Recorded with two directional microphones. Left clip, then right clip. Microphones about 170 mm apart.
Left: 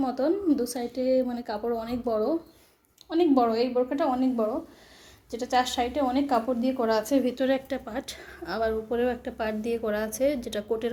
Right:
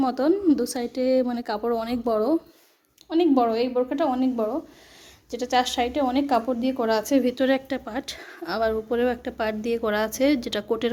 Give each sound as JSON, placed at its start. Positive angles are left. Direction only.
{"t": 0.0, "sound": "a woman's voice", "side_deg": -45}
{"t": 3.1, "sound": "a woman's voice", "side_deg": -15}